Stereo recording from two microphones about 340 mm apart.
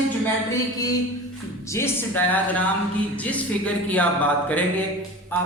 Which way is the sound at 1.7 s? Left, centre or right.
Centre.